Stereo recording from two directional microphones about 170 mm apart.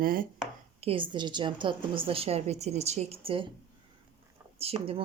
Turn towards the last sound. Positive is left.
turn(degrees=-35)  # may be behind; listen again after turning